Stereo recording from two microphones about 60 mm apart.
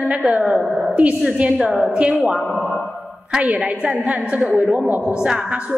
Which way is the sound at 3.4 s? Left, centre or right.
Right.